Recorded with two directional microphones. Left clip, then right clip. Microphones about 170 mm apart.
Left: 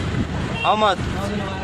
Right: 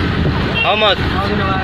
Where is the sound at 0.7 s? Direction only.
35° left (ahead or behind).